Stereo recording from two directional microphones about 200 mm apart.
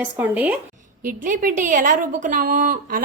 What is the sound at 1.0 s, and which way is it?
A woman's voice, 40° right (ahead or behind).